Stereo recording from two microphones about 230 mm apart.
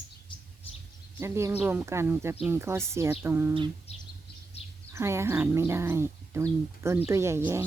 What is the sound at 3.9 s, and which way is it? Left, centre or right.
Bird, left.